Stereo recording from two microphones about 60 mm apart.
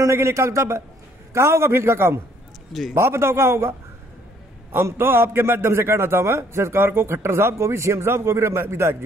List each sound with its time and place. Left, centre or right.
0.0 s a man's voice: right
4.7 s a man's voice: right